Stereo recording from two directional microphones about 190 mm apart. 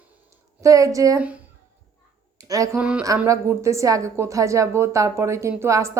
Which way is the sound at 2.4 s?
15° right (ahead or behind).